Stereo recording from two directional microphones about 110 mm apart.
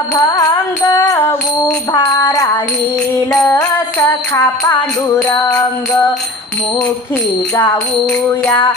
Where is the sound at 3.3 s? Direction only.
30° left (ahead or behind).